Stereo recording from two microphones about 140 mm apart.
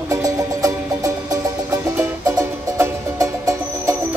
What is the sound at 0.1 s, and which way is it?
Music, 25° right (ahead or behind).